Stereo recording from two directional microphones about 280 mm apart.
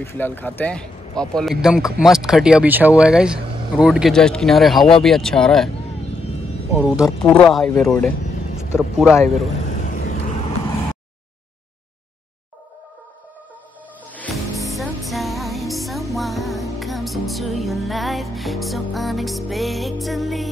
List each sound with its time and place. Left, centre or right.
0.0 s speech: centre
6.7 s speech: centre
9.1 s speech: centre
9.7 s vehicle: left
14.1 s music: centre